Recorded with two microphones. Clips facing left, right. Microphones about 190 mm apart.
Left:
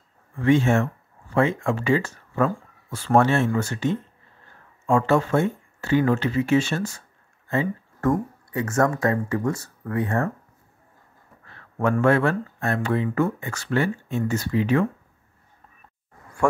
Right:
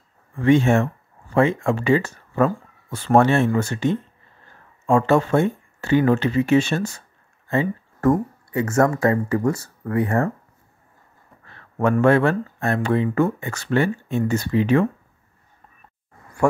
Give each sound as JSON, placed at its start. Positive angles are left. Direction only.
{"t": 0.4, "sound": "speech", "side_deg": -20}
{"t": 4.8, "sound": "speech", "side_deg": -20}
{"t": 7.5, "sound": "speech", "side_deg": -30}
{"t": 11.8, "sound": "speech", "side_deg": -25}